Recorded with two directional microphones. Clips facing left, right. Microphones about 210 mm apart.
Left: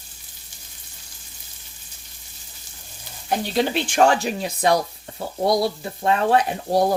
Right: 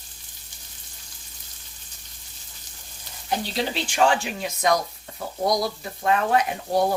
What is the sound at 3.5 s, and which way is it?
Speech, 50° left (ahead or behind).